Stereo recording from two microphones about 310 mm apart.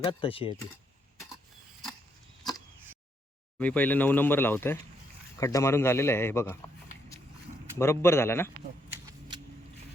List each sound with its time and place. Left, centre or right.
0.0 s a man's voice: centre
3.6 s a man's voice: centre
7.8 s a man's voice: centre